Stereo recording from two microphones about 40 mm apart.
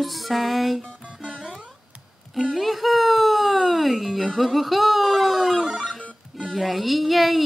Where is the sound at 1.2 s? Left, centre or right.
Right.